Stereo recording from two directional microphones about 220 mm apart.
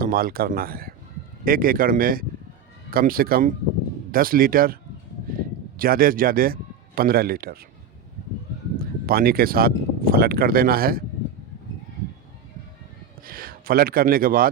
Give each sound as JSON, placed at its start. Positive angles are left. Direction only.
{"t": 0.0, "sound": "speech", "side_deg": -40}
{"t": 8.8, "sound": "speech", "side_deg": -45}
{"t": 13.2, "sound": "speech", "side_deg": -40}